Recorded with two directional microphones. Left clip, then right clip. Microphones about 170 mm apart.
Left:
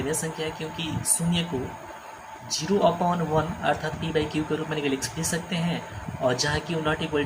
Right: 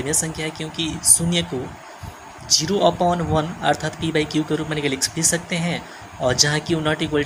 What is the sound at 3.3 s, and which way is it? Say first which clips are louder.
Speech: right 4 dB; 45° right (ahead or behind).